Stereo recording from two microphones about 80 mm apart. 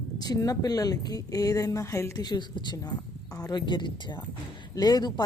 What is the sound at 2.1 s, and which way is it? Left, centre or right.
Speech, left.